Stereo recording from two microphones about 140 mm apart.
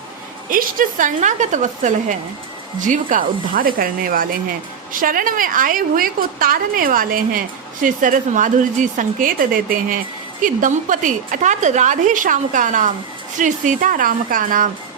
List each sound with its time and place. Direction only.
0.5 s a woman's voice: 75° right (ahead or behind); by 4.3 s 90° right
4.9 s a woman's voice: 80° right
10.4 s a woman's voice: 70° right (ahead or behind)